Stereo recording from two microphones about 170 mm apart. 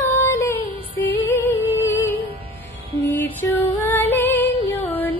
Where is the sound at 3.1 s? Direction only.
10° left (ahead or behind).